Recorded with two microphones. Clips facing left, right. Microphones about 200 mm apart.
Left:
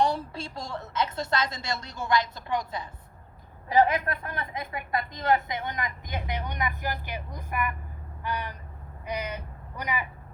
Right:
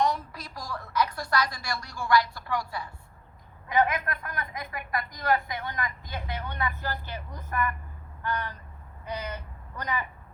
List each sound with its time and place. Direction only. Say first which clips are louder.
0.0 s a woman's voice: left 2 dB; 30° left (ahead or behind)
3.7 s a woman's voice: left 3 dB; 30° left (ahead or behind); by 7.8 s 10° left (ahead or behind)
8.2 s crow: right 1 dB; 10° left (ahead or behind)
9.0 s speech: left 2 dB; 15° left (ahead or behind)